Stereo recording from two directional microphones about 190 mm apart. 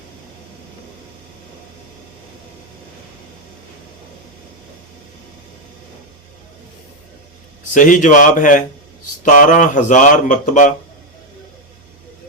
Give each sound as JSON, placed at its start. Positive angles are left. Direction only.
{"t": 7.7, "sound": "a man's voice", "side_deg": 45}